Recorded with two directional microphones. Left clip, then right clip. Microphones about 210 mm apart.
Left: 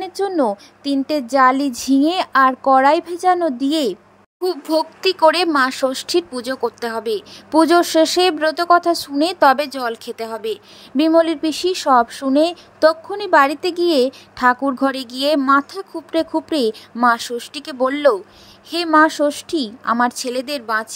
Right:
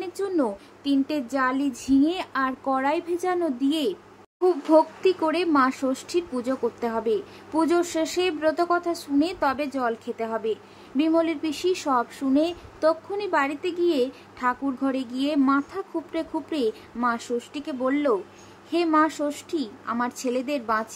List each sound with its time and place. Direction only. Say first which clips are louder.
0.0 s speech: left 7 dB; 30° left (ahead or behind)